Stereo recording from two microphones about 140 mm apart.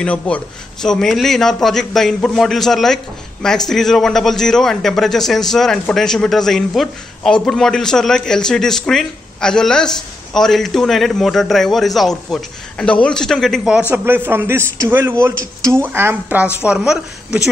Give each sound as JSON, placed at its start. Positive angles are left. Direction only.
{"t": 0.0, "sound": "a man's voice", "side_deg": 10}
{"t": 16.6, "sound": "a man's voice", "side_deg": -5}